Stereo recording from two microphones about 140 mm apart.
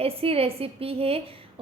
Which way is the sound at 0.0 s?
45° right (ahead or behind).